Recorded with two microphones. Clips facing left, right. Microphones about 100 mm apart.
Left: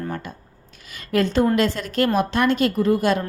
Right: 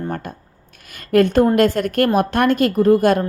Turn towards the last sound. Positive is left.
turn(degrees=-45)  # may be behind; listen again after turning